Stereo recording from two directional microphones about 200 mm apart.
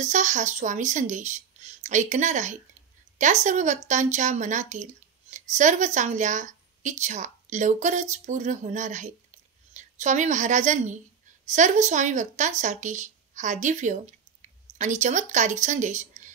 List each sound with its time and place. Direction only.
0.0 s a woman's voice: 35° right (ahead or behind)